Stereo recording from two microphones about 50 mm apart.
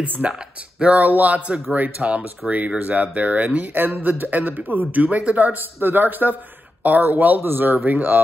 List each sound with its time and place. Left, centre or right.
0.3 s speech: centre
0.9 s speech: right
3.7 s a man's voice: right